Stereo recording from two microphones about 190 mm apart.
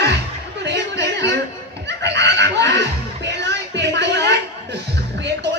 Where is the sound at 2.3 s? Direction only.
65° right (ahead or behind).